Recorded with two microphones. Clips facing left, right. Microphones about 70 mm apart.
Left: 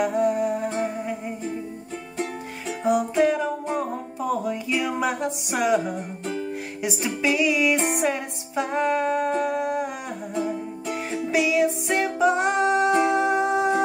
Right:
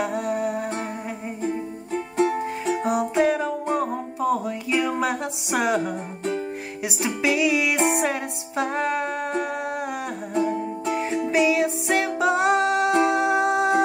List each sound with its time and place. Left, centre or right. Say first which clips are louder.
0.0 s music: left 3 dB; centre
2.6 s music: right 1 dB; right
2.9 s music: left 2 dB; centre
5.6 s music: left 1 dB; centre
10.9 s music: right 2 dB; centre